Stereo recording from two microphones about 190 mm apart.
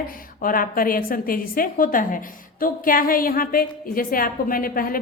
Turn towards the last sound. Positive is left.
turn(degrees=50)  # may be behind; listen again after turning